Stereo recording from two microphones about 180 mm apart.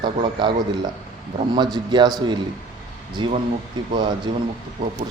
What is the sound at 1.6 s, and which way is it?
A man's voice, 25° right (ahead or behind).